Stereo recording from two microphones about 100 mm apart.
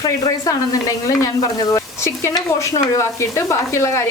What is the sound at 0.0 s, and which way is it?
Speech, 40° left (ahead or behind).